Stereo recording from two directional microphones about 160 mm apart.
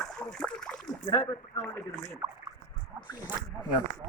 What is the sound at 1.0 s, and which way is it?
Speech, 25° left (ahead or behind).